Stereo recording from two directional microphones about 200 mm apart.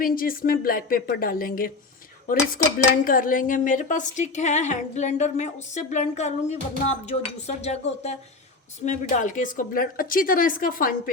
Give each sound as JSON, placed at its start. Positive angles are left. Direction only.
{"t": 0.0, "sound": "speech", "side_deg": 45}
{"t": 2.2, "sound": "cutlery", "side_deg": 45}
{"t": 8.8, "sound": "speech", "side_deg": 40}